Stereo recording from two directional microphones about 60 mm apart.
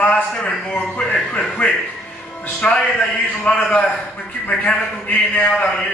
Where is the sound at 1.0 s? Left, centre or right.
Centre.